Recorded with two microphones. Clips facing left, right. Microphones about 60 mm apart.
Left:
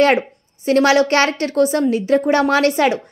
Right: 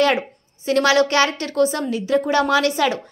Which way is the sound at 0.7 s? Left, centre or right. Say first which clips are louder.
Left 3 dB; left.